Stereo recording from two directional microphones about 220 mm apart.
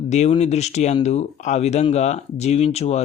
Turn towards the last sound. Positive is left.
turn(degrees=30)  # may be behind; listen again after turning